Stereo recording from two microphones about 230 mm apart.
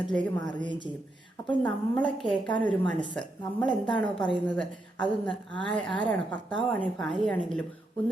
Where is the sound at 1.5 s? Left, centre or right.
Centre.